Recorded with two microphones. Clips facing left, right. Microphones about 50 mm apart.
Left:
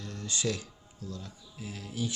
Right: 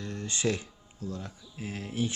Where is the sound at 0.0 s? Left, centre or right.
Right.